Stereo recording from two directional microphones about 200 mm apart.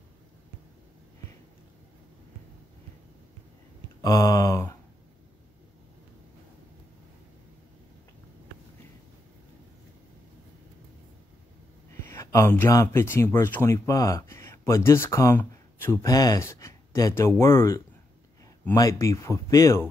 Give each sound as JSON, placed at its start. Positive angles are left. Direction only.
{"t": 4.0, "sound": "speech", "side_deg": 15}
{"t": 12.1, "sound": "speech", "side_deg": 15}